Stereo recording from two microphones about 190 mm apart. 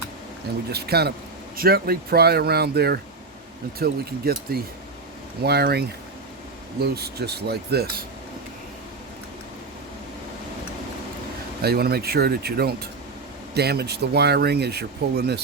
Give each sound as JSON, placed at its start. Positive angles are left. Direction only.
{"t": 0.7, "sound": "speech", "side_deg": -55}
{"t": 6.8, "sound": "speech", "side_deg": -55}
{"t": 11.6, "sound": "speech", "side_deg": -55}